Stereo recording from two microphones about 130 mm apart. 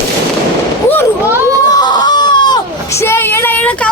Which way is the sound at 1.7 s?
35° left (ahead or behind).